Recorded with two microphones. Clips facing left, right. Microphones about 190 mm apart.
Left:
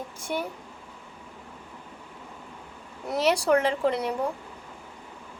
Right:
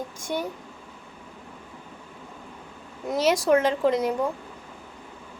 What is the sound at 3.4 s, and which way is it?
Speech, 15° right (ahead or behind).